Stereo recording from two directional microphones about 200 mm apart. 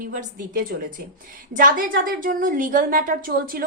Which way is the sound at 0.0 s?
40° right (ahead or behind).